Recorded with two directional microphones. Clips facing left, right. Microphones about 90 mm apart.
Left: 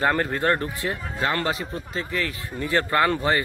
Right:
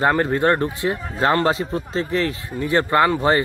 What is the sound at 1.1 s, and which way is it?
Speech, 35° right (ahead or behind).